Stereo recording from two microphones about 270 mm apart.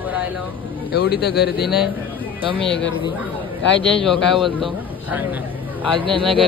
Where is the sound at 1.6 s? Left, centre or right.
Centre.